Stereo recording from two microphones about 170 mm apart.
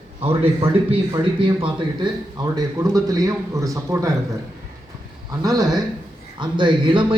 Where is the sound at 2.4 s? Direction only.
20° right (ahead or behind).